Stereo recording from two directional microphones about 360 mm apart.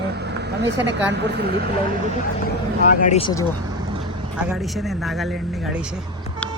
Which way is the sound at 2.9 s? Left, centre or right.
Left.